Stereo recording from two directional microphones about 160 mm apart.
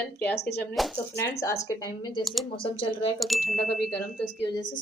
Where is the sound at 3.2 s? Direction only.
Centre (ahead or behind).